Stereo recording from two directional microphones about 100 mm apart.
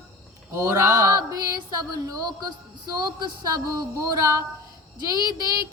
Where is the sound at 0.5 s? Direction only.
30° right (ahead or behind).